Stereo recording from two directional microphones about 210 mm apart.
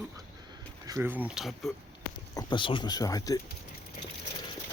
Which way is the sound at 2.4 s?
20° left (ahead or behind).